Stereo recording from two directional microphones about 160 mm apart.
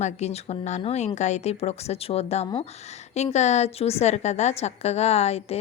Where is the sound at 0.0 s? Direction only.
40° left (ahead or behind).